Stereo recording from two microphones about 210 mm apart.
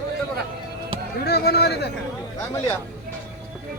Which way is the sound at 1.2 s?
50° left (ahead or behind).